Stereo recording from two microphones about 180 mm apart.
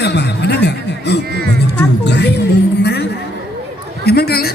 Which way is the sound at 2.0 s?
70° left (ahead or behind).